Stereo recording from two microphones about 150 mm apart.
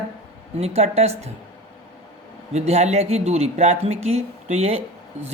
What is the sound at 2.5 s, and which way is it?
Speech, 45° right (ahead or behind).